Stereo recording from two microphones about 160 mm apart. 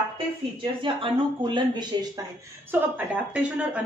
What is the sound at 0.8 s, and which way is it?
Speech, 30° right (ahead or behind).